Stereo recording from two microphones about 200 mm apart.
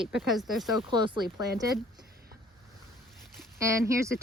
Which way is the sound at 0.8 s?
25° right (ahead or behind).